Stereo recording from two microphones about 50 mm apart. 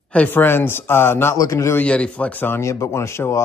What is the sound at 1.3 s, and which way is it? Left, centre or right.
Speech, left.